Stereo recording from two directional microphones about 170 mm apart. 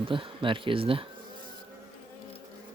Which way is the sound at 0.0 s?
30° right (ahead or behind).